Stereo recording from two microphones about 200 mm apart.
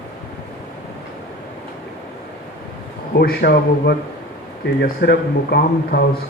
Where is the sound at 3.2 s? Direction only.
50° left (ahead or behind).